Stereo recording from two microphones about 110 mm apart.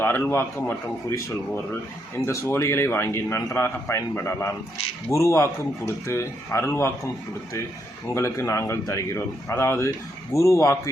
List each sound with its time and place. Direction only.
0.0 s a man's voice: 20° left (ahead or behind)
2.1 s a man's voice: 25° left (ahead or behind)